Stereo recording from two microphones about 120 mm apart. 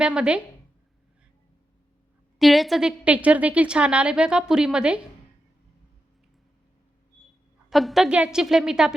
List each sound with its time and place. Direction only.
0.0 s a woman's voice: 10° right (ahead or behind)
2.4 s a woman's voice: centre (ahead or behind)
7.7 s a woman's voice: centre (ahead or behind)